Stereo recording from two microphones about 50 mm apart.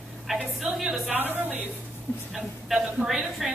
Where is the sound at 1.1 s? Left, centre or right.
Right.